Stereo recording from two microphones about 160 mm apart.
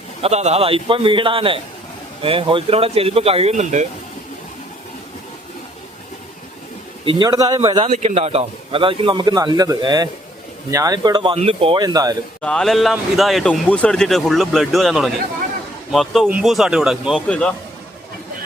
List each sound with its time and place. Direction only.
0.2 s a man's voice: 45° right (ahead or behind)
7.0 s speech: 30° right (ahead or behind)
7.9 s a man's voice: 45° right (ahead or behind); by 12.1 s 25° right (ahead or behind)
12.4 s speech: 5° left (ahead or behind)